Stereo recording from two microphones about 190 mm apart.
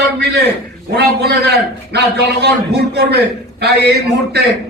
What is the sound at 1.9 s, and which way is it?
A man's voice, 60° right (ahead or behind).